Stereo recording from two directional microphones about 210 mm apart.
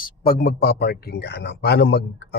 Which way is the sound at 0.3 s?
45° left (ahead or behind).